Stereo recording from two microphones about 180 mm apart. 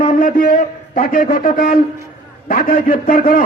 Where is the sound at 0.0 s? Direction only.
50° left (ahead or behind).